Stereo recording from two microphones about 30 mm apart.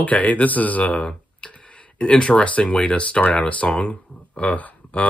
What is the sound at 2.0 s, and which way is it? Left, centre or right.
Speech, left.